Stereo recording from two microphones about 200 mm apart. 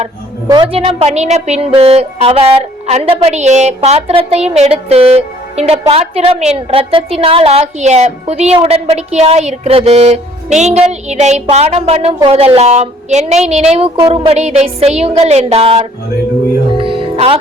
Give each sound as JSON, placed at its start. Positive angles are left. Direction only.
{"t": 0.4, "sound": "a woman's voice", "side_deg": -25}
{"t": 16.7, "sound": "music", "side_deg": -25}